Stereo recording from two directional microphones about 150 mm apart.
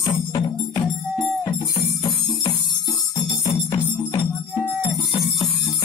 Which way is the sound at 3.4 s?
20° left (ahead or behind).